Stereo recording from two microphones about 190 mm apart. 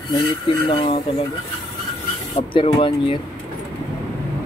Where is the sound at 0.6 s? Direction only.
25° left (ahead or behind).